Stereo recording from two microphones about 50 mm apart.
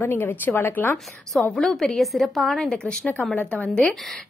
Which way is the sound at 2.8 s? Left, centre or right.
Centre.